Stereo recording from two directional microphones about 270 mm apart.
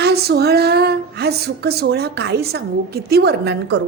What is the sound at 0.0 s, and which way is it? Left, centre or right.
Speech, right.